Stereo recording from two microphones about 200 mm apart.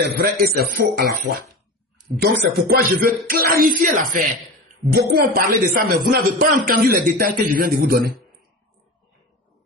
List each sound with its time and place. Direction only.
0.0 s a man's voice: 50° right (ahead or behind)